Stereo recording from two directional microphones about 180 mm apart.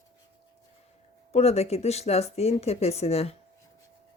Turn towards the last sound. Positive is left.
turn(degrees=35)  # may be behind; listen again after turning